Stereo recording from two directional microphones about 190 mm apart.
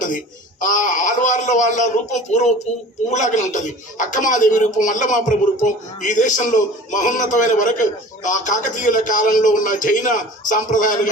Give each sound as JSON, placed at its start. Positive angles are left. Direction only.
{"t": 0.6, "sound": "a man's voice", "side_deg": 45}